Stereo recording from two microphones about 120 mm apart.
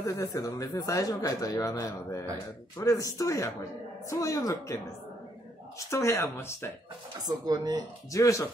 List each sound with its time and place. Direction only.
0.0 s speech: 30° left (ahead or behind)
5.9 s speech: 25° left (ahead or behind)
7.2 s speech: 35° right (ahead or behind)
8.1 s speech: 25° left (ahead or behind)